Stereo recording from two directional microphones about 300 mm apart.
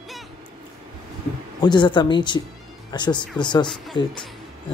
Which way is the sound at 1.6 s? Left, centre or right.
Centre.